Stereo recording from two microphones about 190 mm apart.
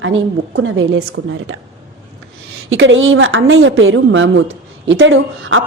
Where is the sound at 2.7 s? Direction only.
85° right.